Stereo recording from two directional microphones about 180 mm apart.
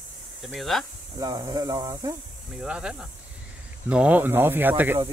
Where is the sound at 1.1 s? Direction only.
20° right (ahead or behind).